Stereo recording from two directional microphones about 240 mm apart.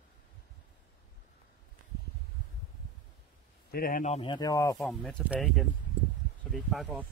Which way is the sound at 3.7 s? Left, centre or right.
Left.